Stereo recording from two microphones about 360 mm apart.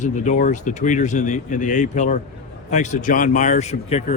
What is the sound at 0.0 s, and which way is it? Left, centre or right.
Speech, left.